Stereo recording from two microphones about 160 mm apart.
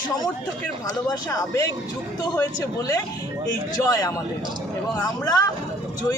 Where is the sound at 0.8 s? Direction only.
25° left (ahead or behind).